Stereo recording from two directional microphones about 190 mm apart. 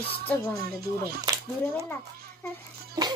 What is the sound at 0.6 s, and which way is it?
Speech, 55° right (ahead or behind).